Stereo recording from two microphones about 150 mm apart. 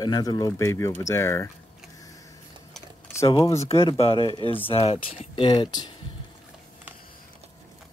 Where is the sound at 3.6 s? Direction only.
40° left (ahead or behind).